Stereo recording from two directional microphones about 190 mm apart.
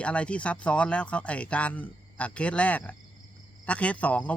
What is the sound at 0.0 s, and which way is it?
Speech, 5° left (ahead or behind).